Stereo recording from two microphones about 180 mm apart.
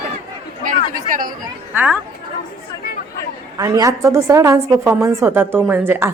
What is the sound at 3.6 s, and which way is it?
A woman's voice, 20° right (ahead or behind).